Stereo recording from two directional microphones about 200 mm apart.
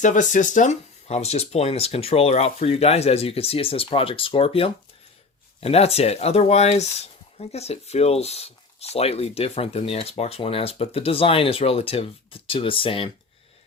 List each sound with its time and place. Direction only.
0.0 s speech: 40° left (ahead or behind)